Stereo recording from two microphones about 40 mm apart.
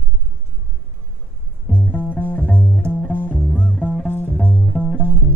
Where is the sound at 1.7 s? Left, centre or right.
Left.